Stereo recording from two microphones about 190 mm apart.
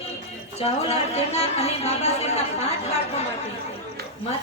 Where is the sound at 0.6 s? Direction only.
35° left (ahead or behind).